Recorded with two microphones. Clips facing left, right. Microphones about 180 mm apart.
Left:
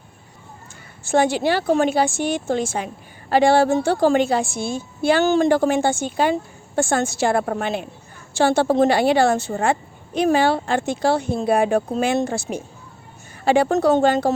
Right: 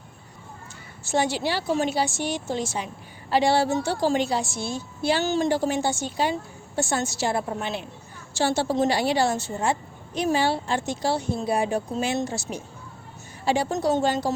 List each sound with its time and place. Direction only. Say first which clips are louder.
1.0 s a woman's voice: left 6 dB; 55° left (ahead or behind)